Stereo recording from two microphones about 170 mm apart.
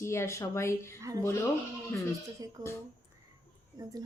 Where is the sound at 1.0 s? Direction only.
20° right (ahead or behind).